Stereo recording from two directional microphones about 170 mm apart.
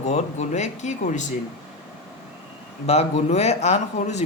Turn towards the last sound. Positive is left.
turn(degrees=40)  # may be behind; listen again after turning